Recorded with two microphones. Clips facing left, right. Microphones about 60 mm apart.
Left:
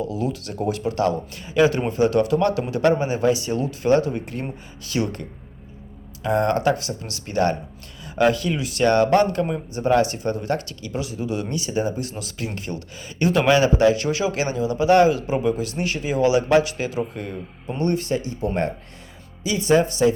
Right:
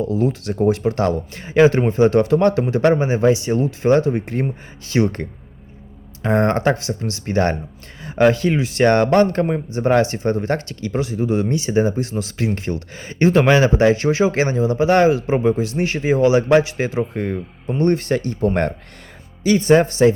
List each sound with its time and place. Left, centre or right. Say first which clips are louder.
0.0 s speech: right 6 dB; right
6.2 s speech: right 3 dB; right
12.7 s speech: right 6 dB; centre
13.1 s speech: right 4 dB; right
17.2 s speech: right 7 dB; right
18.1 s speech: right 5 dB; right